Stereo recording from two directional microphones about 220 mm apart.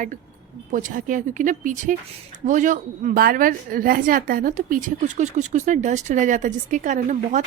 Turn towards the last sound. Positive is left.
turn(degrees=-35)  # may be behind; listen again after turning